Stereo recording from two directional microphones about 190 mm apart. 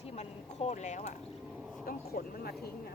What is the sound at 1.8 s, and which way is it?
Speech, 50° left (ahead or behind).